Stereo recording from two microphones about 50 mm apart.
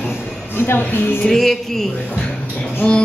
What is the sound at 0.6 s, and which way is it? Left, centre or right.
Speech, left.